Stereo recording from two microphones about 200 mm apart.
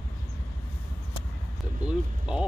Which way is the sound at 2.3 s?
5° right (ahead or behind).